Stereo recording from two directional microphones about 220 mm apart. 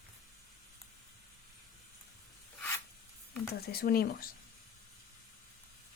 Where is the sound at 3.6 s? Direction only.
45° left (ahead or behind).